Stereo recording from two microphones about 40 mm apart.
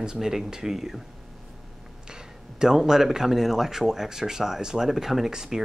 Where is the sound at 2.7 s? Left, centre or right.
Centre.